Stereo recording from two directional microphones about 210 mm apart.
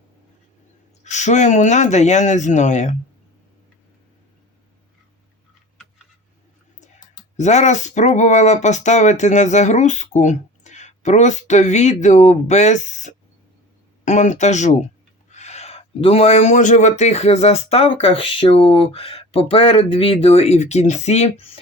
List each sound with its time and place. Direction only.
1.0 s speech: 35° left (ahead or behind)
7.3 s speech: 35° left (ahead or behind)